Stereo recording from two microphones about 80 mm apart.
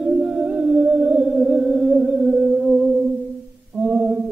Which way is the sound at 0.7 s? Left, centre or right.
Centre.